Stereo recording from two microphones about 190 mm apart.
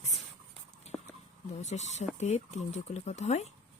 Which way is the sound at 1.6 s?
35° left (ahead or behind).